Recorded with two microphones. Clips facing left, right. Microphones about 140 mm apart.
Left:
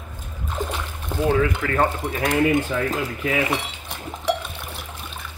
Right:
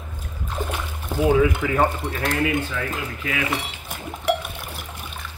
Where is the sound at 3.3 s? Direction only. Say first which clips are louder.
Left 4 dB; 30° left (ahead or behind).